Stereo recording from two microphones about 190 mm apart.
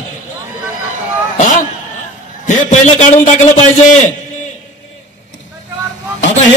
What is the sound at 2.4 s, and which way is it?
A man's voice, 40° left (ahead or behind).